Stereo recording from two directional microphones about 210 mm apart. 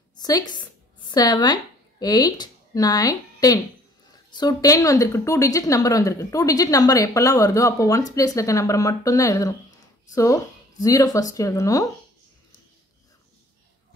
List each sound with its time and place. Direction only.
1.1 s a woman's voice: 20° left (ahead or behind)